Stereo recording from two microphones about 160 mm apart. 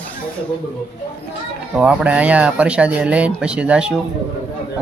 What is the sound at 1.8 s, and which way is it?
Speech, 10° right (ahead or behind).